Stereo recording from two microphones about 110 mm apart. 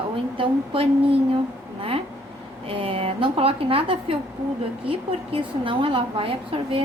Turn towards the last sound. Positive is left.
turn(degrees=-55)  # may be behind; listen again after turning